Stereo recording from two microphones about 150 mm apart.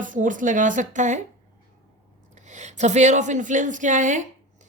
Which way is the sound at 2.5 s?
50° right (ahead or behind).